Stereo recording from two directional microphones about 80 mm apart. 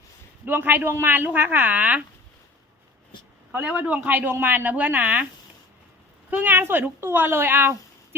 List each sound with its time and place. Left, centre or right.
0.4 s a woman's voice: right
3.7 s a woman's voice: centre
6.3 s a woman's voice: right